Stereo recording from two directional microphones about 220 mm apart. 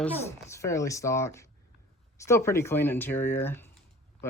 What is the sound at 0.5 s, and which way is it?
Speech, 15° left (ahead or behind).